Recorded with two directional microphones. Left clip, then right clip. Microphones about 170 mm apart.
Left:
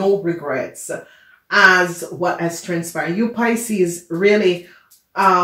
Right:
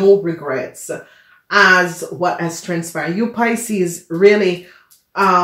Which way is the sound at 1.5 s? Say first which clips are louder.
Right 1 dB; 35° right (ahead or behind).